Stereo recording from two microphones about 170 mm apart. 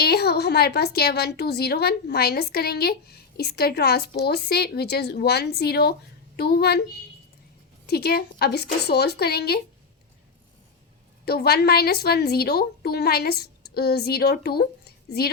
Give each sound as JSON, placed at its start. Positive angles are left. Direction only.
{"t": 0.0, "sound": "a woman's voice", "side_deg": 70}
{"t": 7.9, "sound": "a woman's voice", "side_deg": 65}
{"t": 11.3, "sound": "a woman's voice", "side_deg": 70}